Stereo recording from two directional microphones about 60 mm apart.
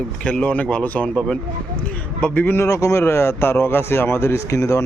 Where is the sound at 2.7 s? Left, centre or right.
Left.